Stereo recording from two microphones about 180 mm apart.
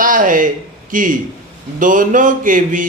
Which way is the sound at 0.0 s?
50° right (ahead or behind).